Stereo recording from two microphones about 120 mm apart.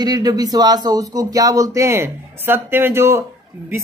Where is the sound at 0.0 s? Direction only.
35° right (ahead or behind).